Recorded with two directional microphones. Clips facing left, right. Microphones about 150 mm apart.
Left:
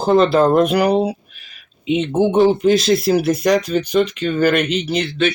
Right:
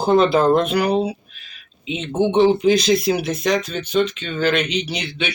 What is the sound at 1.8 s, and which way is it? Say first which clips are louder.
Speech: left 9 dB; 60° left (ahead or behind).